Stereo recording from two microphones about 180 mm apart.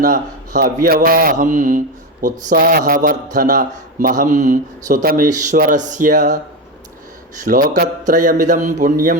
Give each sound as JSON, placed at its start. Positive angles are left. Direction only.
{"t": 0.0, "sound": "a man's voice", "side_deg": -45}
{"t": 7.4, "sound": "a man's voice", "side_deg": -50}